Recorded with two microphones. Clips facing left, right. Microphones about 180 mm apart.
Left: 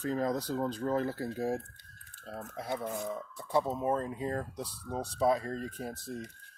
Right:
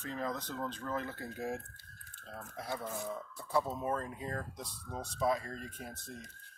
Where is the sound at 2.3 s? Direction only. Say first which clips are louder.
Left 4 dB; 25° left (ahead or behind).